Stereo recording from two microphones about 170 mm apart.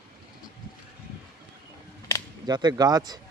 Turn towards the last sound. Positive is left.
turn(degrees=-25)  # may be behind; listen again after turning